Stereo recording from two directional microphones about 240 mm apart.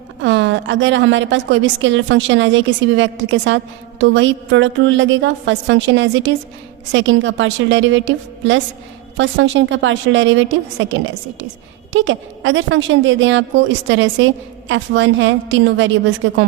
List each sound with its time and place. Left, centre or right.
0.2 s a woman's voice: right
11.9 s a woman's voice: right